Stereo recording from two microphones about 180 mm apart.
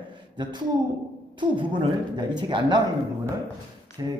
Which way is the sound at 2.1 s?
25° right (ahead or behind).